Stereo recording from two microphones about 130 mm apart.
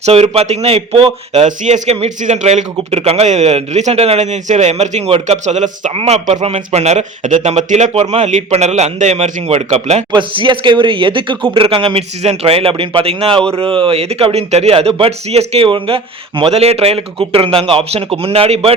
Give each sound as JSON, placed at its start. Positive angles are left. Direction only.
{"t": 0.0, "sound": "a man's voice", "side_deg": -50}
{"t": 5.9, "sound": "a man's voice", "side_deg": -55}
{"t": 10.1, "sound": "a man's voice", "side_deg": -40}